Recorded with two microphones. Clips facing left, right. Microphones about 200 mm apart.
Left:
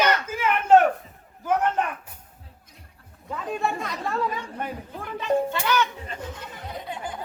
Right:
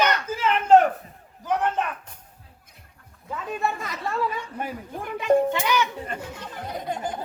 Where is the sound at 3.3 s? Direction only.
Centre (ahead or behind).